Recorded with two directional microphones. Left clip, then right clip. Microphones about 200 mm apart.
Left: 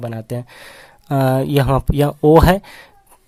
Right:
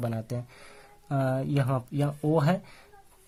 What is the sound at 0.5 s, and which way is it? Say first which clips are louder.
Speech: left 11 dB; 45° left (ahead or behind).